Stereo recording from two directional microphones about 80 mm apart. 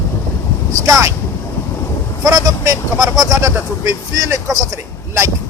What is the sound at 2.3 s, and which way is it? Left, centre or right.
Speech, right.